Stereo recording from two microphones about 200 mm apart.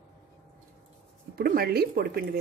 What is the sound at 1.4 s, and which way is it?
Speech, 50° right (ahead or behind).